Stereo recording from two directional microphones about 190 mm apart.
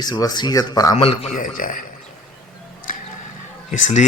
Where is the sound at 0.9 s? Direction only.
30° left (ahead or behind).